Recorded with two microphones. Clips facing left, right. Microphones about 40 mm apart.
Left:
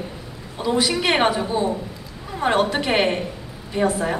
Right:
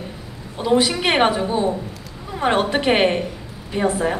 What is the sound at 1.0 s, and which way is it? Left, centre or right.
Speech, right.